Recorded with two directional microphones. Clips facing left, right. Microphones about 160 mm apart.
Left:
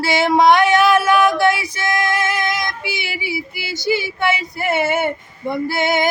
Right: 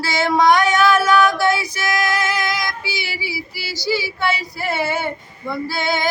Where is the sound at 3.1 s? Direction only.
20° left (ahead or behind).